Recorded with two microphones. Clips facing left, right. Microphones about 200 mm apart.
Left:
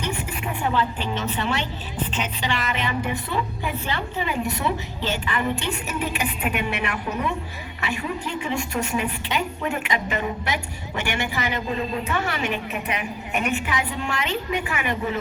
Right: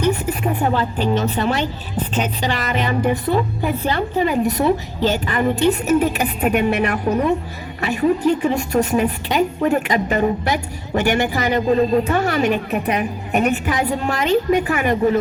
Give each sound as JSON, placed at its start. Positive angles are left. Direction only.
{"t": 0.0, "sound": "a woman's voice", "side_deg": -40}